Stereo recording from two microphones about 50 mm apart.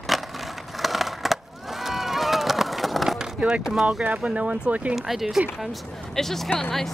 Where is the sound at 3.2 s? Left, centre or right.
Centre.